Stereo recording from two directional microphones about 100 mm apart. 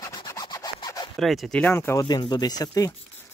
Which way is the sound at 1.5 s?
20° left (ahead or behind).